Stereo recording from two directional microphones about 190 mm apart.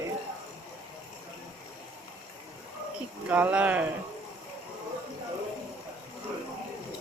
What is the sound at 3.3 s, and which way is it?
Speech, 10° right (ahead or behind).